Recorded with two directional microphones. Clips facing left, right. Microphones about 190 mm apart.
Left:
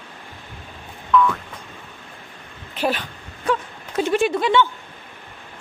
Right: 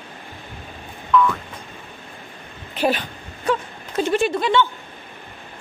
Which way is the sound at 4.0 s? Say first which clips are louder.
Even; 10° left (ahead or behind).